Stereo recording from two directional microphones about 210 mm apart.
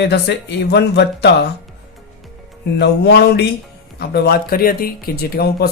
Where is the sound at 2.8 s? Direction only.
50° left (ahead or behind).